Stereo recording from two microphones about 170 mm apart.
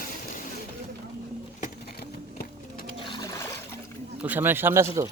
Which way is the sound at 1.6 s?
60° left (ahead or behind).